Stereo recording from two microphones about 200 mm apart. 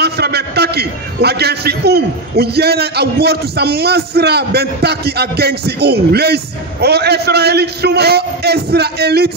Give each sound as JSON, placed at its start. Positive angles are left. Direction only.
{"t": 0.0, "sound": "a man's voice", "side_deg": -55}